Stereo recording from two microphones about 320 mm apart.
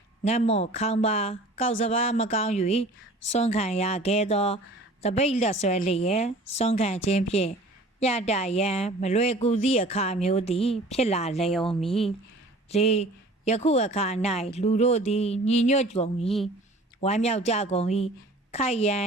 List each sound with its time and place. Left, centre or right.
0.3 s a woman's voice: centre
11.5 s speech: centre
12.7 s a woman's voice: centre